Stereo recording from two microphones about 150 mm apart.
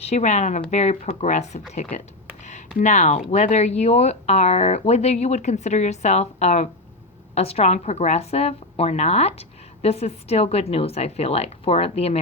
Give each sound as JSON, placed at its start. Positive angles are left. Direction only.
{"t": 0.0, "sound": "a woman's voice", "side_deg": 50}
{"t": 2.4, "sound": "a sound", "side_deg": 55}
{"t": 2.7, "sound": "a woman's voice", "side_deg": 50}